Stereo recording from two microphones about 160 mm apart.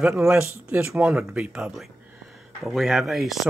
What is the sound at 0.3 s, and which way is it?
Speech, 10° right (ahead or behind).